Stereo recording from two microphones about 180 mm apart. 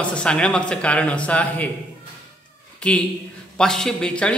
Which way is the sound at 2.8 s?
5° left (ahead or behind).